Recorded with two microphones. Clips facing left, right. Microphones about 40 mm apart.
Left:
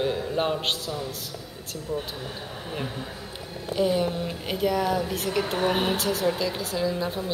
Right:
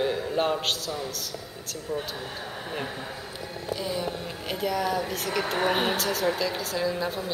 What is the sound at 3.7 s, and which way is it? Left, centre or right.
Speech, left.